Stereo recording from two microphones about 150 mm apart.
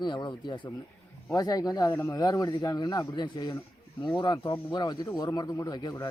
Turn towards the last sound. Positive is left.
turn(degrees=25)  # may be behind; listen again after turning